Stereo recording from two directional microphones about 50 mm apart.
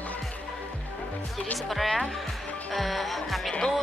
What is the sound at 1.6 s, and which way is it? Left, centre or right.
Speech, centre.